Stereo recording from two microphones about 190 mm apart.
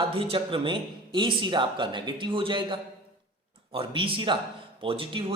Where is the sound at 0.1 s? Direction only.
30° right (ahead or behind).